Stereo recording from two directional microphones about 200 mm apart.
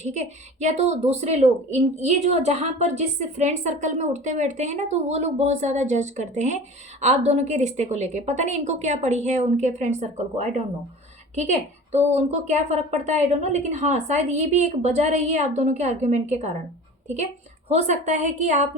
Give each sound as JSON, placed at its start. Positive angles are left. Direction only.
{"t": 0.0, "sound": "a woman's voice", "side_deg": -35}
{"t": 11.9, "sound": "a woman's voice", "side_deg": -35}
{"t": 17.7, "sound": "a woman's voice", "side_deg": -35}